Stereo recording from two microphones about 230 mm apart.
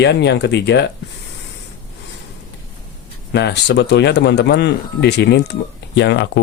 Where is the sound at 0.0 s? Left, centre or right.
Left.